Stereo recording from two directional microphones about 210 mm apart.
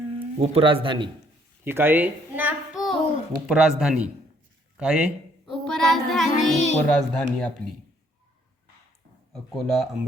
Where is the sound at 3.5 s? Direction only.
5° right (ahead or behind).